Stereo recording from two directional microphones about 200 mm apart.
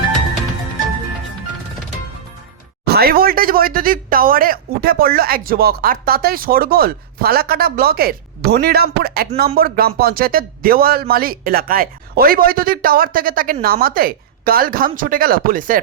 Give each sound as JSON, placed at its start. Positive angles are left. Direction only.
{"t": 2.8, "sound": "a man's voice", "side_deg": -50}